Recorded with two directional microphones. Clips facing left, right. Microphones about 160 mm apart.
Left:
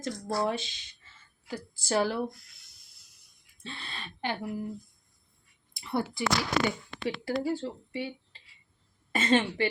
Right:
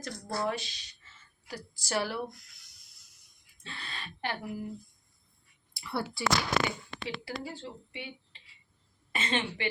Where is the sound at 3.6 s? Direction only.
25° left (ahead or behind).